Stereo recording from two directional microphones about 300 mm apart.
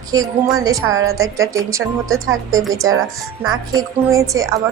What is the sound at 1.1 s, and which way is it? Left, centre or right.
A woman's voice, centre.